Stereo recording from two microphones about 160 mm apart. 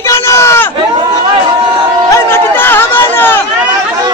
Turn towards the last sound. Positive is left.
turn(degrees=15)  # may be behind; listen again after turning